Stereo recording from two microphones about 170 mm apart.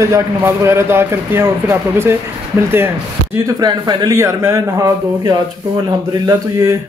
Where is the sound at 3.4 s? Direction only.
25° right (ahead or behind).